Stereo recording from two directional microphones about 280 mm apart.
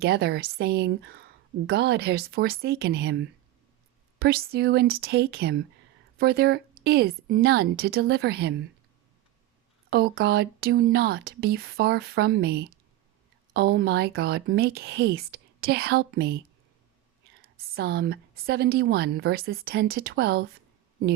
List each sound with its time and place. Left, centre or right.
0.0 s a woman's voice: right
9.9 s a woman's voice: right
17.4 s a woman's voice: right